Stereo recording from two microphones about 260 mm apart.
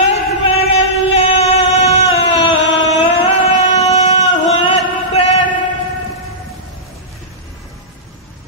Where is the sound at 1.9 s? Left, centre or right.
Left.